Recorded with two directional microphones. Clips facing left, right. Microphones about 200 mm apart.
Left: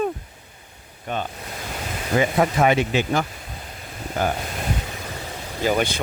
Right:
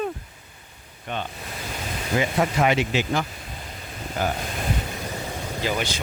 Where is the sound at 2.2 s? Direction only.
50° left (ahead or behind).